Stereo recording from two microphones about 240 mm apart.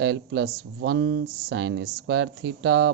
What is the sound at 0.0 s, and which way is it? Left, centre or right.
Speech, right.